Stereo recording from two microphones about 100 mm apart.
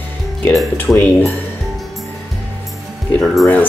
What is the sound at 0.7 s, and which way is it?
Speech, 20° left (ahead or behind).